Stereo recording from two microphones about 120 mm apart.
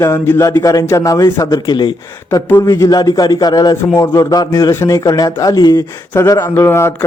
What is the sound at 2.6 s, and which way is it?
Speech, 30° left (ahead or behind).